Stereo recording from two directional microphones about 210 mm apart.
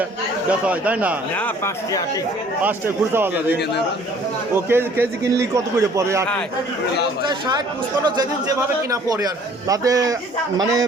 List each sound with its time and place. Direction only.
0.6 s a man's voice: 5° right (ahead or behind)
1.4 s speech: 10° left (ahead or behind)
2.6 s a man's voice: 10° right (ahead or behind)